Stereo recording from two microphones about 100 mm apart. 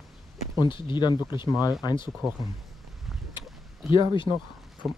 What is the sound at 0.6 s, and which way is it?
Speech, 55° left (ahead or behind).